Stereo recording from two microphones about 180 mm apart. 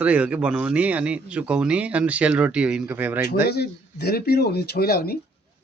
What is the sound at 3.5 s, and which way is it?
Speech, 65° left (ahead or behind).